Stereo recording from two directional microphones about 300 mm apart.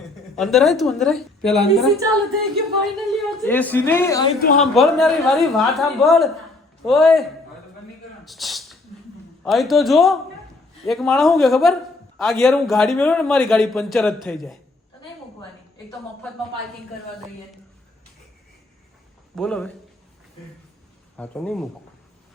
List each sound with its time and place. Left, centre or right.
0.3 s a man's voice: centre
4.4 s a woman's voice: left
4.6 s a man's voice: centre
8.2 s a sound: centre
9.4 s a man's voice: centre
19.4 s a man's voice: centre
21.2 s a man's voice: centre